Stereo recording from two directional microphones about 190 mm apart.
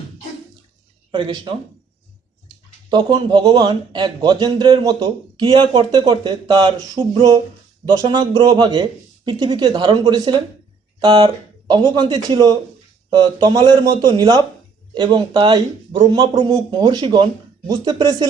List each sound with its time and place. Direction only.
1.1 s a man's voice: 25° right (ahead or behind)
2.9 s a man's voice: 20° right (ahead or behind)